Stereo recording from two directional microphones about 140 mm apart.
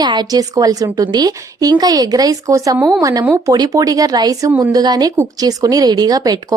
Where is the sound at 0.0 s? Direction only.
30° right (ahead or behind).